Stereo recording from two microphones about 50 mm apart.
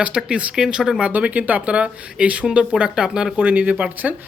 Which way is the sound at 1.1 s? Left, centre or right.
Right.